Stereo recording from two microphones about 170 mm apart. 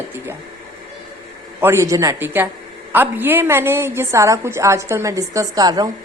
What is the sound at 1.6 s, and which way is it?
A woman's voice, 15° right (ahead or behind).